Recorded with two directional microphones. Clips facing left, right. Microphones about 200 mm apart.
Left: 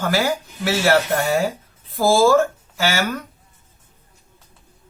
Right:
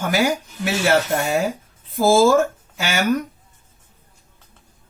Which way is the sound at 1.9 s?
20° right (ahead or behind).